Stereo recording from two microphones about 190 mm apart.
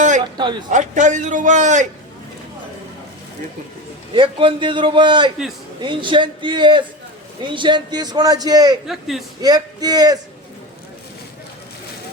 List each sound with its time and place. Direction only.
0.3 s a man's voice: 25° right (ahead or behind)
0.7 s a man's voice: 40° right (ahead or behind)
4.1 s a man's voice: 25° right (ahead or behind)
8.9 s speech: centre (ahead or behind)
9.4 s a man's voice: 20° right (ahead or behind)